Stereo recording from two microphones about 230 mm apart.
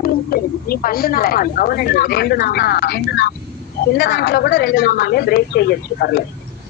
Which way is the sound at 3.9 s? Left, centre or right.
Left.